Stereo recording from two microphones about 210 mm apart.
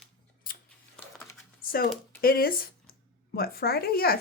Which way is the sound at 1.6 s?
45° left (ahead or behind).